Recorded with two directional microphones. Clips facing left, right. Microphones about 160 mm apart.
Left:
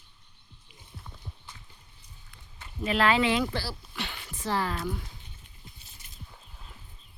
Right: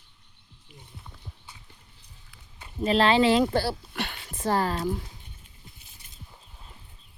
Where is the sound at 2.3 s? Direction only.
15° right (ahead or behind).